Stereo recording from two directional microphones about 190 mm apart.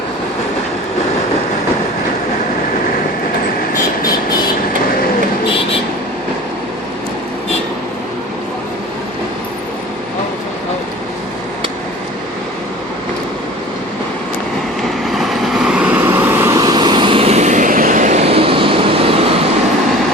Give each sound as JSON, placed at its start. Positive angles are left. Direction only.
{"t": 15.1, "sound": "vehicle", "side_deg": 0}